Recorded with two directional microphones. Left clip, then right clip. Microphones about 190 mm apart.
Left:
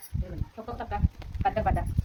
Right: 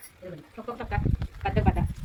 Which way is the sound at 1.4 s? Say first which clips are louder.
Left 2 dB; 25° left (ahead or behind).